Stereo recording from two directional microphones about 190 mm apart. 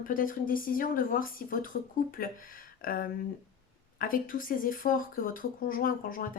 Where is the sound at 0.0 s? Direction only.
45° left (ahead or behind).